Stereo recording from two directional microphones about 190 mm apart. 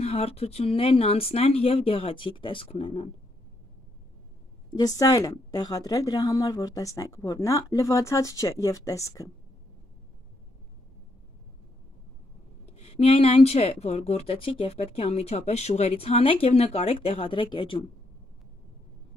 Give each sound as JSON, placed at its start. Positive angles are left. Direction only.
{"t": 0.0, "sound": "speech", "side_deg": 30}
{"t": 4.6, "sound": "speech", "side_deg": 20}
{"t": 12.7, "sound": "speech", "side_deg": 35}